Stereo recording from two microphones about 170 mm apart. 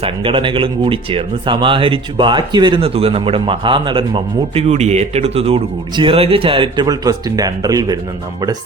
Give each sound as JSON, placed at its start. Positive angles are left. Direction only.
{"t": 0.0, "sound": "speech", "side_deg": -30}